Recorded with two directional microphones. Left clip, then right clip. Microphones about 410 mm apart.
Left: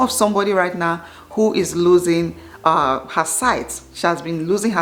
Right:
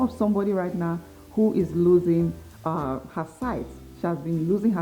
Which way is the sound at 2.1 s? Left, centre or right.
Centre.